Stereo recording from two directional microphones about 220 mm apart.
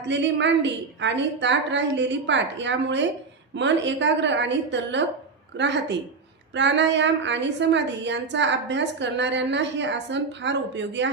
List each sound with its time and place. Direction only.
0.1 s a woman's voice: 55° right (ahead or behind)